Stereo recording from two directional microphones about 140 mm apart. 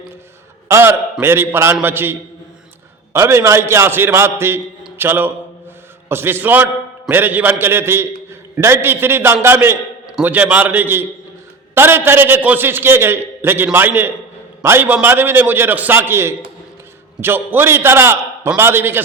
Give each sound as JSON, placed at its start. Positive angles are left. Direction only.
{"t": 0.7, "sound": "a man's voice", "side_deg": -20}
{"t": 4.8, "sound": "a sound", "side_deg": -15}
{"t": 6.1, "sound": "a man's voice", "side_deg": -15}